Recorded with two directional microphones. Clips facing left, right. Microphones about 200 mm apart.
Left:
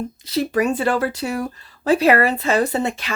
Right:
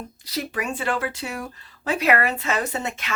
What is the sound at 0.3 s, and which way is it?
Speech, 35° left (ahead or behind).